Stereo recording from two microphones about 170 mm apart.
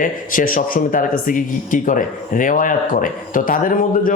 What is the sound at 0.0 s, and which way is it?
Speech, 55° left (ahead or behind).